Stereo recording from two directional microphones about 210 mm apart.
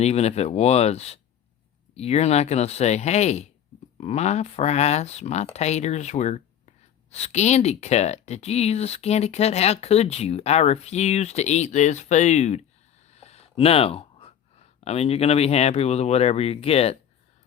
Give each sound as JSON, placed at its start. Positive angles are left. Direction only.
{"t": 0.0, "sound": "speech", "side_deg": 30}